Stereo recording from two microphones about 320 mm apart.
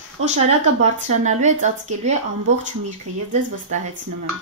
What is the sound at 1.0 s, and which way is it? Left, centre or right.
Speech, right.